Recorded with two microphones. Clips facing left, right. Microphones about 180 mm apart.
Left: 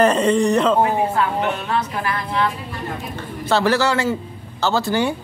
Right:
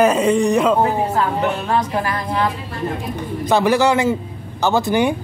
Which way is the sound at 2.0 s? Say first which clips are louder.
Right 1 dB; 40° right (ahead or behind).